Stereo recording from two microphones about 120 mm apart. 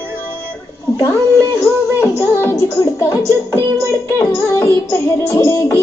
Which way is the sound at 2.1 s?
25° left (ahead or behind).